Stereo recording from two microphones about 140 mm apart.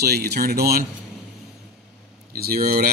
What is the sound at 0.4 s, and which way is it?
Speech, 90° right.